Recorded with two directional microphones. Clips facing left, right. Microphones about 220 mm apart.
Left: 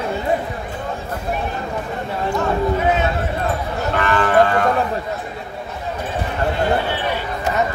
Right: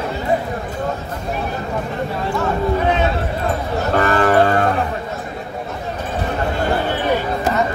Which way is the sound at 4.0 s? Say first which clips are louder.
Right 1 dB; 40° right (ahead or behind).